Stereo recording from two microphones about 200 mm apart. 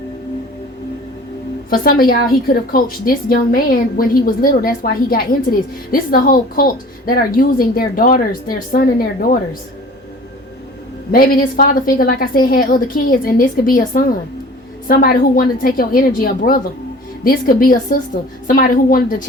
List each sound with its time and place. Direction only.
1.7 s a woman's voice: 45° left (ahead or behind)
11.1 s a woman's voice: 45° left (ahead or behind)